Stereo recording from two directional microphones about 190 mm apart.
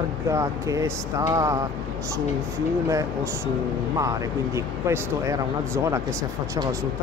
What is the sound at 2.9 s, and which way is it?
Speech, 15° right (ahead or behind).